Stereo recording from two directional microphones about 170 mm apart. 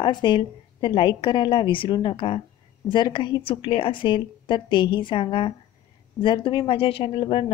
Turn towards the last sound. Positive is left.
turn(degrees=30)  # may be behind; listen again after turning